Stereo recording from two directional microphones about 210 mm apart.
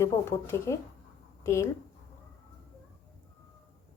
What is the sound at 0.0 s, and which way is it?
A woman's voice, 15° left (ahead or behind).